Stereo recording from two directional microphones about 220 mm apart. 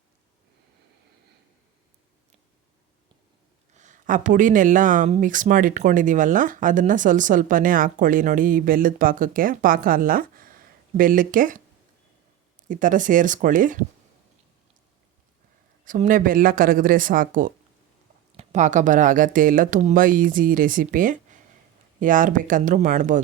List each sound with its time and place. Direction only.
3.8 s speech: 35° right (ahead or behind)
12.6 s speech: 35° right (ahead or behind)
15.8 s speech: 35° right (ahead or behind)